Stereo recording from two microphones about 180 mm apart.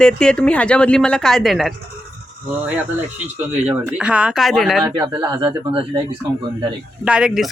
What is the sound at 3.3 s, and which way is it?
Speech, 5° right (ahead or behind).